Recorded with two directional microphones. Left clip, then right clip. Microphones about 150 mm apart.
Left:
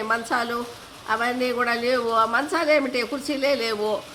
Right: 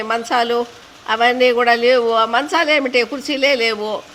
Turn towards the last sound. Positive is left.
turn(degrees=-20)  # may be behind; listen again after turning